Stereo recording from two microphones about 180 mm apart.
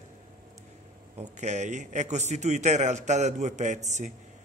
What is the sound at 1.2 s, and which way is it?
A man's voice, 40° right (ahead or behind).